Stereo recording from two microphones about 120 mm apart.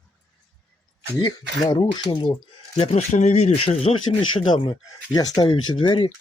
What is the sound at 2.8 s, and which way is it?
Speech, 60° left (ahead or behind).